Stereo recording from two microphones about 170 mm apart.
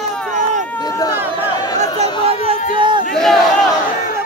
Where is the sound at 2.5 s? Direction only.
30° right (ahead or behind).